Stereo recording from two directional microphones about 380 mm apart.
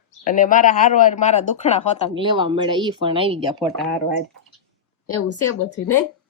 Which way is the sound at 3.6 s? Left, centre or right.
Centre.